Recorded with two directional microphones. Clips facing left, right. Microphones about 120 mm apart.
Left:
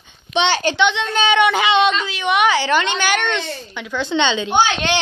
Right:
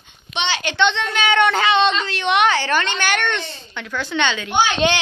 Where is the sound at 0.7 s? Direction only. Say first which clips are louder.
Left 1 dB; 10° left (ahead or behind).